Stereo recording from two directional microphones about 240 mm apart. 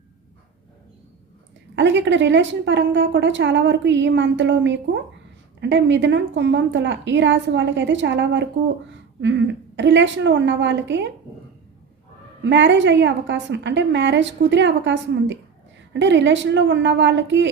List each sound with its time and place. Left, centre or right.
1.7 s a woman's voice: right
12.4 s a woman's voice: right